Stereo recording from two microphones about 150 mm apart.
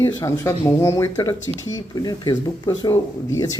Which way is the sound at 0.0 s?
20° left (ahead or behind).